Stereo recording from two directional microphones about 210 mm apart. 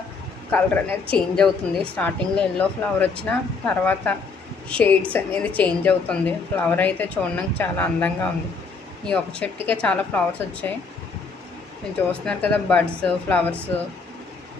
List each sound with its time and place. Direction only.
0.5 s a woman's voice: 5° left (ahead or behind)
12.2 s a woman's voice: 5° left (ahead or behind)